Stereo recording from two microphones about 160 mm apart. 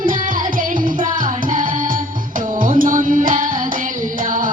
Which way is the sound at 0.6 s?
55° right (ahead or behind).